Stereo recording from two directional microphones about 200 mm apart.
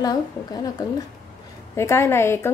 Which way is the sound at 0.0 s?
20° left (ahead or behind).